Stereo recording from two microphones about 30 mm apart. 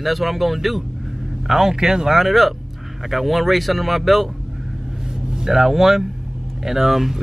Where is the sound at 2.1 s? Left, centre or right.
Centre.